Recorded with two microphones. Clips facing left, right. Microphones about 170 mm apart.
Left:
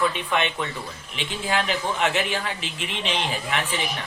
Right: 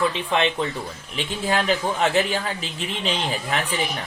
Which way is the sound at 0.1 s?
30° right (ahead or behind).